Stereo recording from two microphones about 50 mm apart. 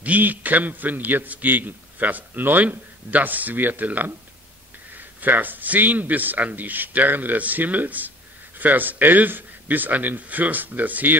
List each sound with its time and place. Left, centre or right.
0.0 s a man's voice: right